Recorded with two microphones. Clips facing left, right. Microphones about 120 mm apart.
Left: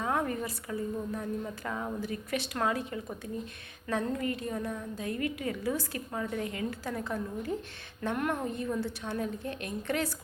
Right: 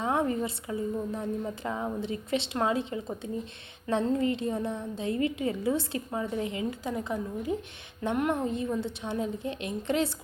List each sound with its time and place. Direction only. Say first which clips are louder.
0.0 s a woman's voice: right 3 dB; 20° right (ahead or behind)